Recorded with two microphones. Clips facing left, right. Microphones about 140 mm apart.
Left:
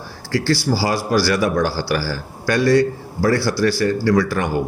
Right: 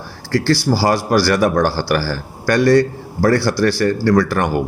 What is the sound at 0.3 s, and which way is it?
A man's voice, 60° right (ahead or behind).